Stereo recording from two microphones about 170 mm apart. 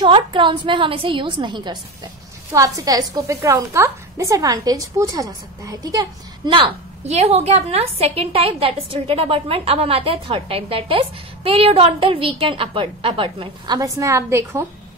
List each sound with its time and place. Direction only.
0.0 s a woman's voice: 30° right (ahead or behind)
13.7 s a woman's voice: 20° right (ahead or behind)